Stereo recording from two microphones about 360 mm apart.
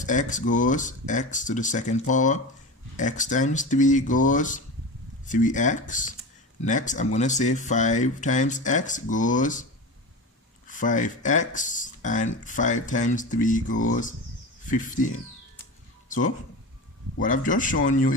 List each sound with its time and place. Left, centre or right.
0.0 s speech: left
10.7 s speech: left
16.0 s a sound: left
17.2 s speech: left